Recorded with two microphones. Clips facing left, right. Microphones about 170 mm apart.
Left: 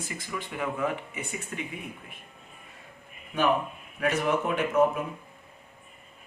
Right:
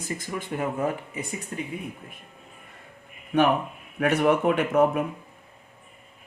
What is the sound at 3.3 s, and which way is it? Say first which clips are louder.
Speech: right 4 dB; 65° right (ahead or behind).